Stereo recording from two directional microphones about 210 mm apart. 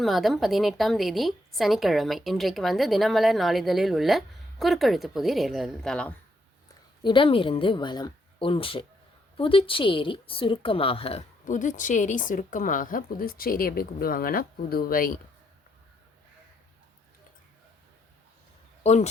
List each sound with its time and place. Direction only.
0.0 s a woman's voice: centre (ahead or behind)
7.0 s a woman's voice: 25° left (ahead or behind); by 15.2 s 45° left (ahead or behind)
18.8 s speech: 30° left (ahead or behind)